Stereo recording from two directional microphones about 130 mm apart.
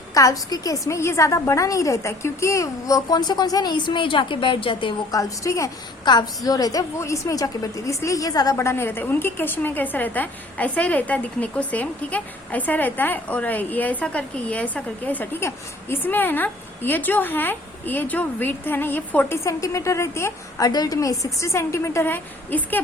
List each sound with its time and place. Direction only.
0.1 s a woman's voice: 25° left (ahead or behind)
5.1 s a woman's voice: 25° left (ahead or behind)